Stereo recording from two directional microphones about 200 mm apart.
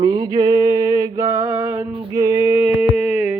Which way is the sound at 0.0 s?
20° right (ahead or behind).